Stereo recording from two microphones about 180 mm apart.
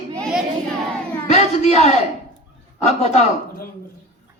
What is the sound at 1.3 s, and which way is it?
A man's voice, 40° left (ahead or behind).